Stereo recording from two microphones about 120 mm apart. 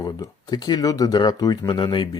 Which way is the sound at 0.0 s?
35° left (ahead or behind).